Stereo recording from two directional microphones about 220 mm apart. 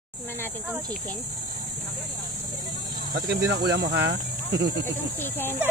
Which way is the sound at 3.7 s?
50° right (ahead or behind).